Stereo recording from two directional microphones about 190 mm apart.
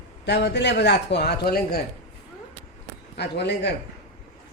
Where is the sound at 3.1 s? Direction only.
60° left (ahead or behind).